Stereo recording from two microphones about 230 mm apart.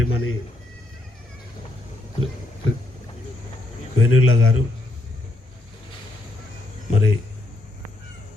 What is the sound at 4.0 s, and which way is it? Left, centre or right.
Speech, left.